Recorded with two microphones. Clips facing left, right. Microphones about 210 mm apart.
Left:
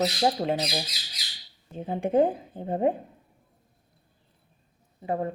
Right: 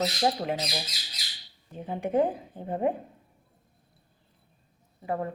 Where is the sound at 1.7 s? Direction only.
25° left (ahead or behind).